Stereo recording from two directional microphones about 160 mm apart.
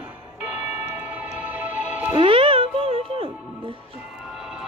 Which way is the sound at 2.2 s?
35° right (ahead or behind).